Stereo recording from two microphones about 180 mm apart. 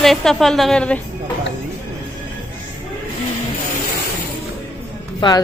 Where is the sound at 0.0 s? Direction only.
Centre (ahead or behind).